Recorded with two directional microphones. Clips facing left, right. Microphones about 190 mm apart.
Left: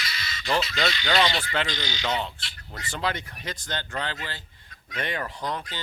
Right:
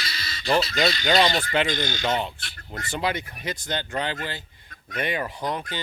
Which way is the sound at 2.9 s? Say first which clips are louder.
Right 3 dB; 10° right (ahead or behind).